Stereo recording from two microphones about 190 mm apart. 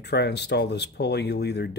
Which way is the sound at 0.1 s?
60° left (ahead or behind).